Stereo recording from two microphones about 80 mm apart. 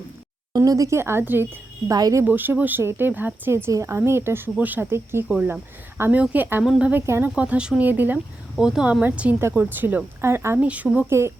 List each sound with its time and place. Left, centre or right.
0.5 s a woman's voice: right
1.9 s speech: right
2.2 s speech: right
3.5 s a woman's voice: right; by 7.0 s centre
7.0 s a woman's voice: right
7.3 s speech: centre
8.5 s speech: centre; by 10.6 s right
10.6 s speech: centre
11.1 s a woman's voice: right